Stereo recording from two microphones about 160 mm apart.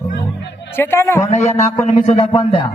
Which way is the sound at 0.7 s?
15° left (ahead or behind).